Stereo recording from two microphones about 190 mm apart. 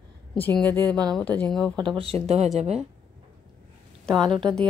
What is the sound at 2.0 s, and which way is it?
Speech, 30° right (ahead or behind).